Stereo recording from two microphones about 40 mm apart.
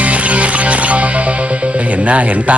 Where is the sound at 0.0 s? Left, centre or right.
Right.